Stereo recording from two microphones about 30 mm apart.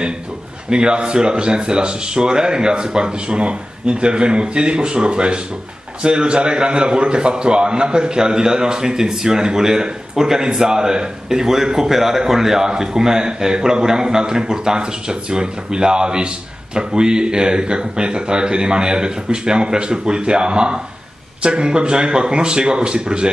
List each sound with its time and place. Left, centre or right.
0.7 s a man's voice: right